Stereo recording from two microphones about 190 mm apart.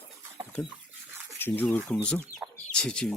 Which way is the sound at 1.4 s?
10° left (ahead or behind).